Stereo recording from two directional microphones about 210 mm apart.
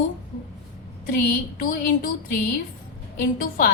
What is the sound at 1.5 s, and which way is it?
Speech, 40° left (ahead or behind).